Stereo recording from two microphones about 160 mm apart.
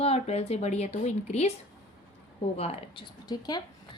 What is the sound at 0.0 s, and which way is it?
Speech, 40° left (ahead or behind).